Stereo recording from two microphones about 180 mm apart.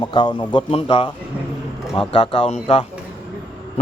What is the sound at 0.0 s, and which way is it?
A man's voice, 25° left (ahead or behind).